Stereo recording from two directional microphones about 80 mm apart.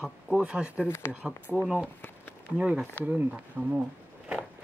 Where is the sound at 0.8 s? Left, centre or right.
Left.